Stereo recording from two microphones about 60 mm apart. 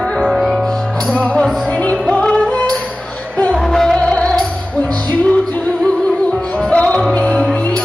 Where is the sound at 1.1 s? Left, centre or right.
Centre.